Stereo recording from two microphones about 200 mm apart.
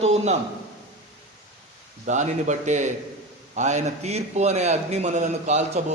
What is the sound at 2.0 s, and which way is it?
A man's voice, 35° right (ahead or behind).